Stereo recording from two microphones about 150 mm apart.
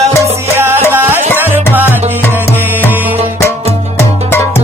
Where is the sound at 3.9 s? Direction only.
15° left (ahead or behind).